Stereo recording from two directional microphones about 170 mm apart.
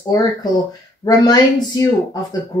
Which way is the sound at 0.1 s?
25° left (ahead or behind).